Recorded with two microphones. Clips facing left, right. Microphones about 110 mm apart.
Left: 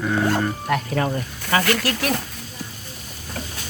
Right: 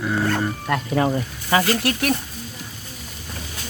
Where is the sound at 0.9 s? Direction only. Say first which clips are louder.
Right 3 dB; 15° right (ahead or behind).